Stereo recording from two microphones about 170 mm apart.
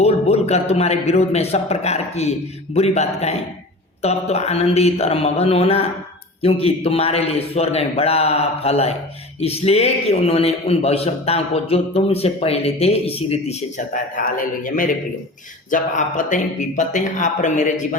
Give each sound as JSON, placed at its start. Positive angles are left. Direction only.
{"t": 0.0, "sound": "a man's voice", "side_deg": 35}